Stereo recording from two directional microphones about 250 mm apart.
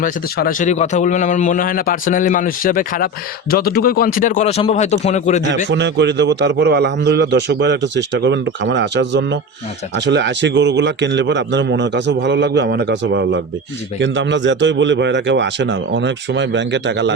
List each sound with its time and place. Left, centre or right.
0.0 s a man's voice: left
5.7 s a man's voice: right